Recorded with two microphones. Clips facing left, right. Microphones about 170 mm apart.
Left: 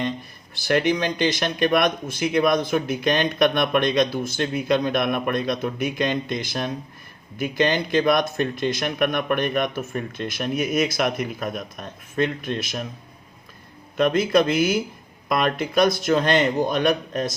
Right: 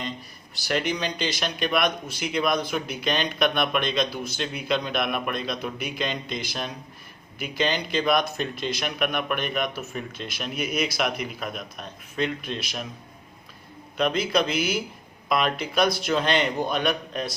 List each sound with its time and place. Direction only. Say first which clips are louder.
0.5 s speech: left 6 dB; 50° left (ahead or behind)
13.9 s speech: left 5 dB; 50° left (ahead or behind)